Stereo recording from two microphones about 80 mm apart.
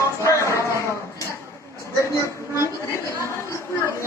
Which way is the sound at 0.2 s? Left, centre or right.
Left.